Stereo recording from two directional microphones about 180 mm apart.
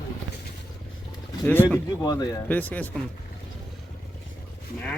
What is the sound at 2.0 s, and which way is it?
Speech, 20° left (ahead or behind).